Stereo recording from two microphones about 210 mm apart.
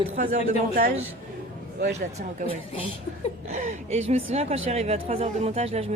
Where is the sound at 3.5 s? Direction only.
35° right (ahead or behind).